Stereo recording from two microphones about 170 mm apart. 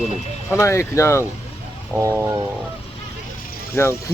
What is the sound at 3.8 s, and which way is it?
Speech, 15° left (ahead or behind).